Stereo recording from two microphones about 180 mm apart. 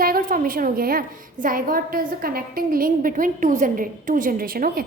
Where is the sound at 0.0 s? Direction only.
50° right (ahead or behind).